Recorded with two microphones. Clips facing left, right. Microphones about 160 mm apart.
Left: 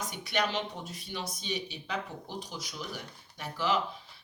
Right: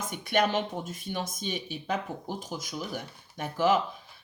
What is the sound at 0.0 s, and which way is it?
Speech, 50° right (ahead or behind).